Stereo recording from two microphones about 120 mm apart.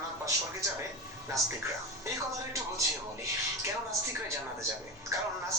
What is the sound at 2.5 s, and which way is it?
Speech, 25° right (ahead or behind).